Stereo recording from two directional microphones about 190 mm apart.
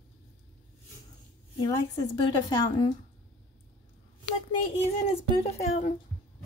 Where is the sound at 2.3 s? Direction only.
25° left (ahead or behind).